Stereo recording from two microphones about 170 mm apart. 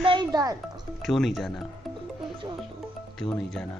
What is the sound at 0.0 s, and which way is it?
Speech, 30° right (ahead or behind).